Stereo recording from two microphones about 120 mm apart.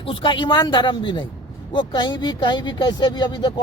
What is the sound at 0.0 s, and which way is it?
Speech, 45° left (ahead or behind).